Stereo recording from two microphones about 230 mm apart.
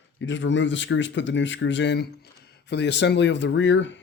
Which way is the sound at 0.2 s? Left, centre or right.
Left.